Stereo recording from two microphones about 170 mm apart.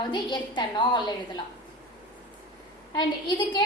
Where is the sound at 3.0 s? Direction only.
25° left (ahead or behind).